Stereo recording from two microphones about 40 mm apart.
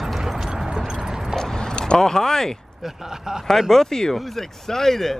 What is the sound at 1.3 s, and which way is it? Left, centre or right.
Clip-clop, centre.